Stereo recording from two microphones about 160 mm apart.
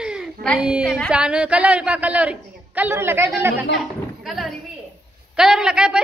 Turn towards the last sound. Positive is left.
turn(degrees=-5)  # may be behind; listen again after turning